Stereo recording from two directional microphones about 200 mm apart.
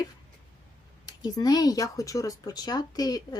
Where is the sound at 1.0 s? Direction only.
20° left (ahead or behind).